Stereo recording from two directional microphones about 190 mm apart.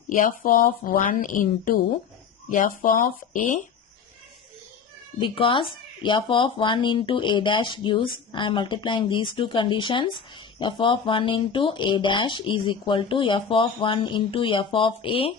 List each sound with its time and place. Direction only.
0.1 s a woman's voice: 45° left (ahead or behind)
5.2 s speech: 25° left (ahead or behind)